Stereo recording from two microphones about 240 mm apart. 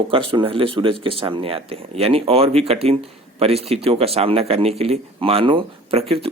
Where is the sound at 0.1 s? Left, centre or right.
Right.